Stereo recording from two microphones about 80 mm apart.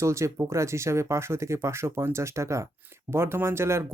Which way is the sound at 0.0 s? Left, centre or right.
Right.